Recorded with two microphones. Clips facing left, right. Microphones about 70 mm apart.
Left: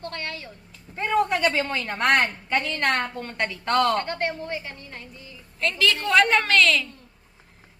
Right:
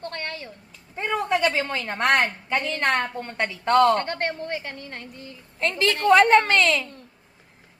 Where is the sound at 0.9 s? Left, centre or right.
Centre.